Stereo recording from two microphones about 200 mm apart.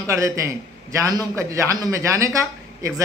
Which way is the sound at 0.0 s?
15° right (ahead or behind).